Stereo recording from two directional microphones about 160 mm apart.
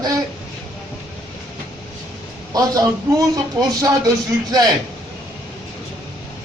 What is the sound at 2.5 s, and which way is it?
Speech, 20° right (ahead or behind).